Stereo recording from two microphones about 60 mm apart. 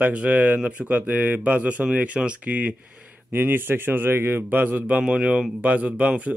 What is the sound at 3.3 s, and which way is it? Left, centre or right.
A man's voice, right.